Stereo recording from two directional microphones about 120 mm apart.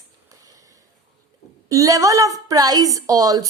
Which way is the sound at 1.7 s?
30° right (ahead or behind).